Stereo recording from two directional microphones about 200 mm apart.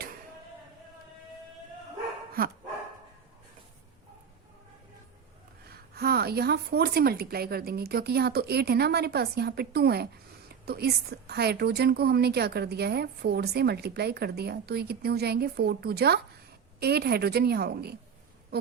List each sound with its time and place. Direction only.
2.4 s a woman's voice: 45° right (ahead or behind)
5.9 s a woman's voice: 50° right (ahead or behind)